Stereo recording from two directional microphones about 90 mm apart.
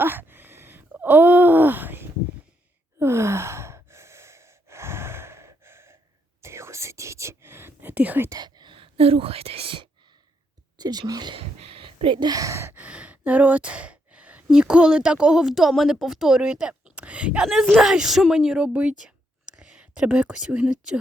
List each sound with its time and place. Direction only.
0.0 s groan: 25° right (ahead or behind)
3.0 s sigh: 30° right (ahead or behind)
6.4 s whispering: 30° right (ahead or behind)
8.3 s speech: 50° right (ahead or behind); by 9.8 s 85° right
10.8 s speech: 50° right (ahead or behind)
11.3 s a sound: 90° right; by 12.3 s 70° right (ahead or behind)
12.3 s speech: 40° right (ahead or behind)
12.8 s speech: 15° right (ahead or behind)